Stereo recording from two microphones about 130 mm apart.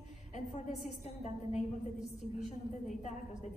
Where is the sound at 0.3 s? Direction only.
65° left (ahead or behind).